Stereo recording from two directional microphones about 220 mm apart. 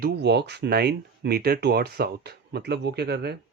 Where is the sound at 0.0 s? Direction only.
50° right (ahead or behind).